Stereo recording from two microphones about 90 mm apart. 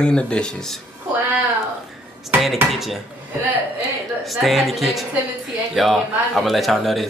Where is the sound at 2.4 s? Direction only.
Centre (ahead or behind).